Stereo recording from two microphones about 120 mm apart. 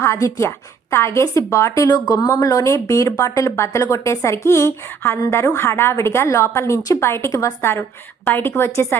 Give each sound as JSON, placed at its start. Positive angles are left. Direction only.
{"t": 0.0, "sound": "speech", "side_deg": 25}